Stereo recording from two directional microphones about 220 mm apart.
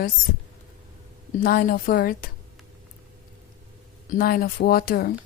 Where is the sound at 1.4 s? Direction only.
40° left (ahead or behind).